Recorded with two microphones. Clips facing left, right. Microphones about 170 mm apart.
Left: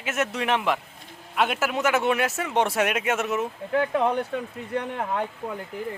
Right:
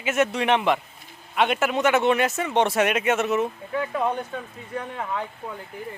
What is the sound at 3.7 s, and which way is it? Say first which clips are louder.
Speech: left 4 dB; 65° left (ahead or behind).